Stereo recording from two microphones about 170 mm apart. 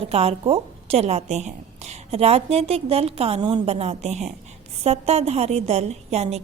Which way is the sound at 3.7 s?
40° right (ahead or behind).